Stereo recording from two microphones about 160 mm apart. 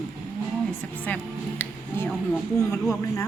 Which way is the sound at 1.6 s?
10° left (ahead or behind).